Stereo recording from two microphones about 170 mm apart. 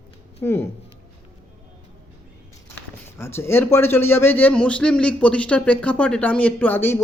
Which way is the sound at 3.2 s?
15° left (ahead or behind).